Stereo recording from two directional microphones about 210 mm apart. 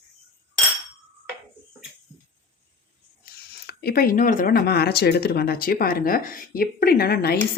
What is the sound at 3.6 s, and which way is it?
Speech, 45° left (ahead or behind).